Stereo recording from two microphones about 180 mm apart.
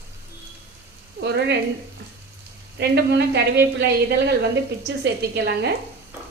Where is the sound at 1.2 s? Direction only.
70° right (ahead or behind).